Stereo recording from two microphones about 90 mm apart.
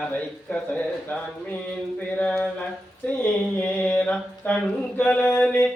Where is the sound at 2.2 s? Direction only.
15° left (ahead or behind).